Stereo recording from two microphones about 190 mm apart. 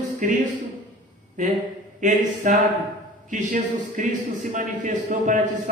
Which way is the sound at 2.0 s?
40° right (ahead or behind).